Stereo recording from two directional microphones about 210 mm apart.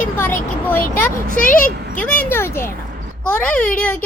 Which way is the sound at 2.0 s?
10° left (ahead or behind).